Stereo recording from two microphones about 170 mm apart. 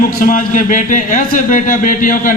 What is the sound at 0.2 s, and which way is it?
Speech, 50° left (ahead or behind).